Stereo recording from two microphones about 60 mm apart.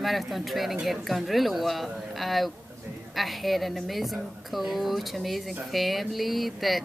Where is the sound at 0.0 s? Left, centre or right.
Centre.